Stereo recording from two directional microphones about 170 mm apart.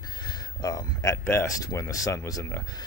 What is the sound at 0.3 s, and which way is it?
Speech, 25° left (ahead or behind).